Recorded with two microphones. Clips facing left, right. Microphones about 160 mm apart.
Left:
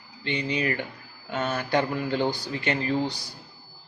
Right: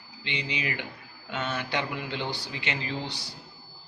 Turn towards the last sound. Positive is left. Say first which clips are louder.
# left 8 dB
turn(degrees=45)  # may be behind; listen again after turning